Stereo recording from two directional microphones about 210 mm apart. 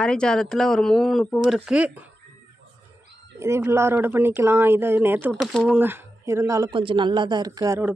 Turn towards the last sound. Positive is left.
turn(degrees=-15)  # may be behind; listen again after turning